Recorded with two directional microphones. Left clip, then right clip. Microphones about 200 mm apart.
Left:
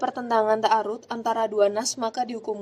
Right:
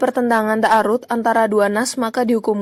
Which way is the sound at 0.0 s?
15° right (ahead or behind).